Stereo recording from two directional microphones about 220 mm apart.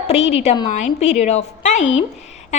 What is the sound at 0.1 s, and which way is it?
A woman's voice, 30° left (ahead or behind).